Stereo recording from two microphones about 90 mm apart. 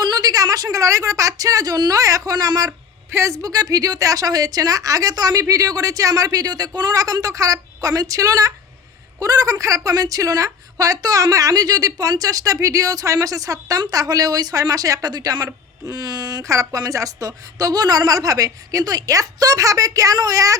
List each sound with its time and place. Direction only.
0.0 s a woman's voice: 50° right (ahead or behind)
3.1 s a woman's voice: 30° right (ahead or behind)